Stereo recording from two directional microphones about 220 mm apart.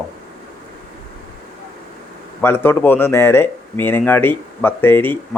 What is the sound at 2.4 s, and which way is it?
Speech, 10° left (ahead or behind).